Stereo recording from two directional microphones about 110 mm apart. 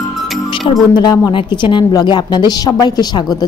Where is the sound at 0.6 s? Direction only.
40° left (ahead or behind).